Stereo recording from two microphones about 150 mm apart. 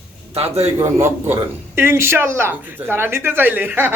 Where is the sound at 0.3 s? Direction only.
45° right (ahead or behind).